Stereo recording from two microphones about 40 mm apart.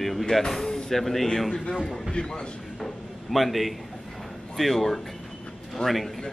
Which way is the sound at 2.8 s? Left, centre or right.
Centre.